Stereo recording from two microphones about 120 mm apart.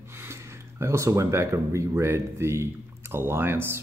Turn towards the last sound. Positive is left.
turn(degrees=-20)  # may be behind; listen again after turning